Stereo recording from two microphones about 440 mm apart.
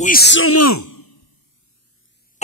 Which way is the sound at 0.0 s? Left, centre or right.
Left.